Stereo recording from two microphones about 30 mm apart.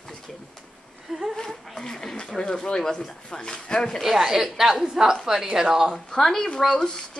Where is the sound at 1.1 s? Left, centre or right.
Centre.